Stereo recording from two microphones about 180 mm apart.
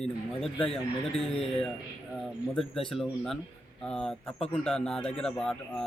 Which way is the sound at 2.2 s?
Centre (ahead or behind).